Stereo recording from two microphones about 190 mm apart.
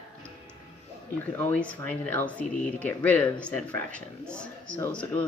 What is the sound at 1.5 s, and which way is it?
Speech, 5° left (ahead or behind).